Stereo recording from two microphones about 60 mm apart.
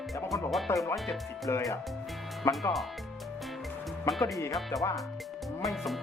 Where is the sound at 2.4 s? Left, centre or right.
Left.